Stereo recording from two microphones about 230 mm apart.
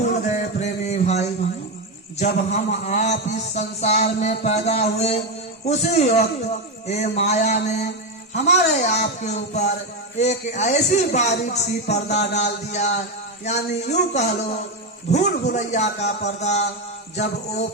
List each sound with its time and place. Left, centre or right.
0.0 s a sound: left
2.1 s a man's voice: left
15.5 s a man's voice: left